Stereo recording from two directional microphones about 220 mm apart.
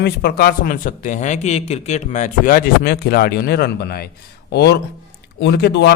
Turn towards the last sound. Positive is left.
turn(degrees=50)  # may be behind; listen again after turning